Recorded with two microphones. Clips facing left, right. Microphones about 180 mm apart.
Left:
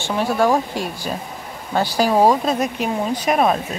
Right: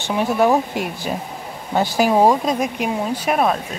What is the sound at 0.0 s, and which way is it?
A woman's voice, 20° right (ahead or behind).